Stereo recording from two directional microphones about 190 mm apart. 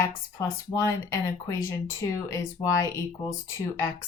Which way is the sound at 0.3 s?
15° left (ahead or behind).